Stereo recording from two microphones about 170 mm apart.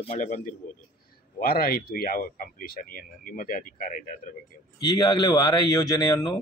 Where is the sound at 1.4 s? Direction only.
60° left (ahead or behind).